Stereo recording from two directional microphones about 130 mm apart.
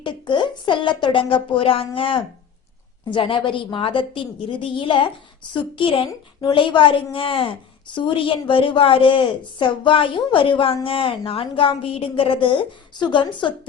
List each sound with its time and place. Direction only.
0.0 s a woman's voice: 40° left (ahead or behind)